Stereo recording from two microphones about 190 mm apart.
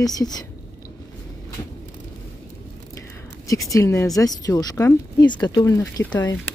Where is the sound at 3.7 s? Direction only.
15° left (ahead or behind).